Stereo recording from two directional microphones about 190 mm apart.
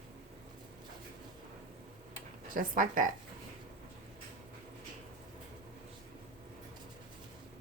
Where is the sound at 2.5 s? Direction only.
45° right (ahead or behind).